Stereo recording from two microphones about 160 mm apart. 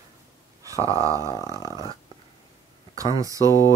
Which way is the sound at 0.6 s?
20° right (ahead or behind).